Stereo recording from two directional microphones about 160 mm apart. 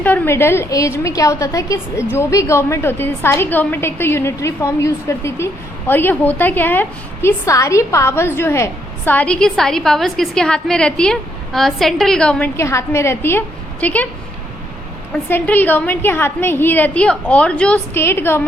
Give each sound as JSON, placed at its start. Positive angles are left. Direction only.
{"t": 0.0, "sound": "a woman's voice", "side_deg": 15}
{"t": 12.5, "sound": "a woman's voice", "side_deg": 15}
{"t": 15.3, "sound": "a woman's voice", "side_deg": 10}